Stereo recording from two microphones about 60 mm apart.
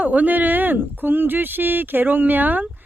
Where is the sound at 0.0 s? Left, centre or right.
Right.